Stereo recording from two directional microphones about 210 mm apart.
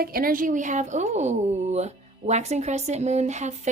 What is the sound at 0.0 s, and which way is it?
A woman's voice, 45° right (ahead or behind).